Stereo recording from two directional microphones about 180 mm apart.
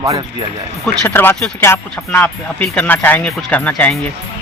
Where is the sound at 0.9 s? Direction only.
10° left (ahead or behind).